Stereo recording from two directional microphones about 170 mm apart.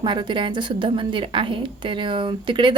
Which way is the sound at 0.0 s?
25° right (ahead or behind).